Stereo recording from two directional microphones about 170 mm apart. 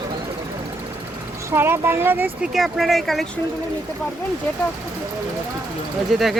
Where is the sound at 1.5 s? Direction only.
15° right (ahead or behind).